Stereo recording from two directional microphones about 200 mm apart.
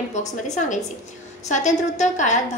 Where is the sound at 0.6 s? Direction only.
35° left (ahead or behind).